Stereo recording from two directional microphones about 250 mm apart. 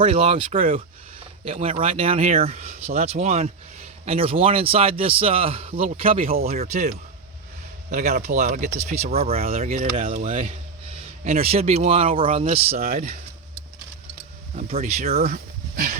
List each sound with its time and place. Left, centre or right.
0.0 s speech: right
6.3 s speech: right
6.6 s speech: right
12.7 s speech: right
14.5 s speech: right